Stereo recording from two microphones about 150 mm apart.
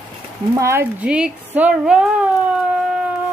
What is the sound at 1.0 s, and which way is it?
A woman's voice, 5° right (ahead or behind).